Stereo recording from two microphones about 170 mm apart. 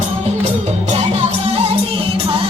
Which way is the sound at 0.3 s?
40° right (ahead or behind).